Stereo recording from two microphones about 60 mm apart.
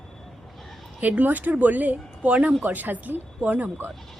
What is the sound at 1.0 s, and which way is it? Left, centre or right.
Speech, right.